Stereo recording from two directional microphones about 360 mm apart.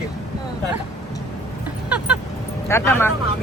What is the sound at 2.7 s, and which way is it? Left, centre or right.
Speech, centre.